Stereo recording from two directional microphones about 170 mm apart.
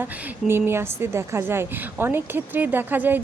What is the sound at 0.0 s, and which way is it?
Speech, 15° right (ahead or behind).